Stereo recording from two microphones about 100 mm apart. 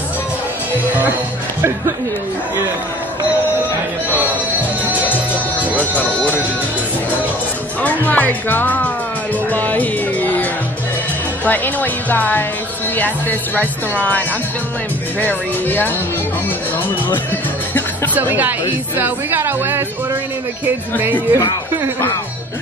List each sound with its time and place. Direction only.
4.1 s music: 15° right (ahead or behind)
5.9 s speech: 15° right (ahead or behind)
7.8 s speech: 15° left (ahead or behind)
9.5 s music: 15° left (ahead or behind)
11.4 s speech: 20° left (ahead or behind)
15.1 s speech: 15° left (ahead or behind)
18.1 s a woman's voice: 20° right (ahead or behind)
21.0 s speech: 20° right (ahead or behind)